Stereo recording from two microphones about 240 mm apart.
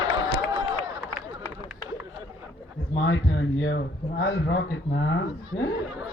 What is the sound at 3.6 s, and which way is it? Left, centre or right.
Speech, left.